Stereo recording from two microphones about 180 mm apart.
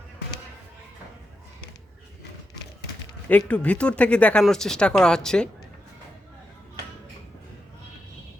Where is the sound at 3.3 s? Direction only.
5° left (ahead or behind).